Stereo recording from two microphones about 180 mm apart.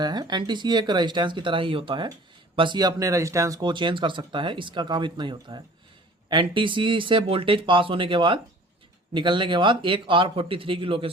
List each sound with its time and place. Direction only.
0.0 s speech: 25° right (ahead or behind)